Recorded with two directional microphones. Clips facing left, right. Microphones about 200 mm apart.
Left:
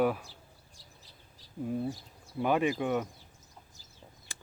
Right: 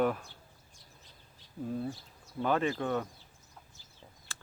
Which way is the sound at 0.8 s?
35° left (ahead or behind).